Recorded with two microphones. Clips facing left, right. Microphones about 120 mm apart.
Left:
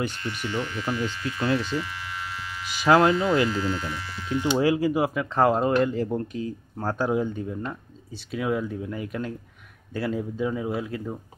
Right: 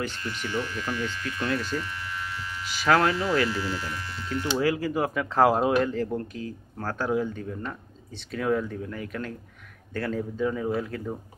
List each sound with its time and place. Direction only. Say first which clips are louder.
0.0 s speech: left 2 dB; 20° left (ahead or behind); by 5.9 s 5° right (ahead or behind)
5.9 s speech: left 2 dB; 15° left (ahead or behind)